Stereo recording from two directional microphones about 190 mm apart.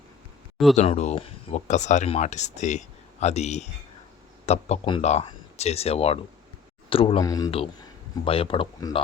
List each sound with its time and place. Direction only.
0.8 s speech: 35° left (ahead or behind)
7.3 s speech: 20° left (ahead or behind)